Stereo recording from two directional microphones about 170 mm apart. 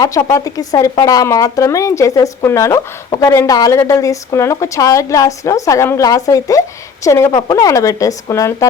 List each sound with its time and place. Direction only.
0.0 s speech: 20° left (ahead or behind)